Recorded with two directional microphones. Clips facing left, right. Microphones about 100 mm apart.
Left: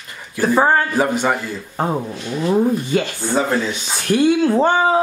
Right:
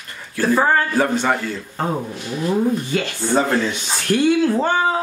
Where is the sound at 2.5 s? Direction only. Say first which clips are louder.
Left 3 dB; 20° left (ahead or behind).